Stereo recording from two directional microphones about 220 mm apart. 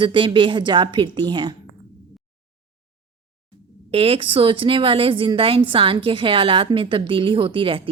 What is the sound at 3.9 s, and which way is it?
A woman's voice, 25° right (ahead or behind).